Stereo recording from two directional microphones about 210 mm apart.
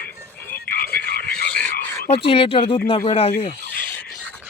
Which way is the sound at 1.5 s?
5° left (ahead or behind).